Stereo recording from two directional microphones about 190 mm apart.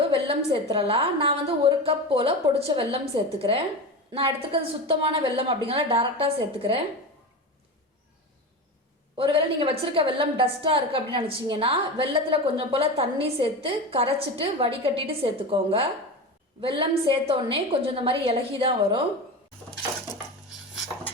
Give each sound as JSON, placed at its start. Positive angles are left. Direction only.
{"t": 0.1, "sound": "a woman's voice", "side_deg": -30}
{"t": 9.1, "sound": "a woman's voice", "side_deg": -25}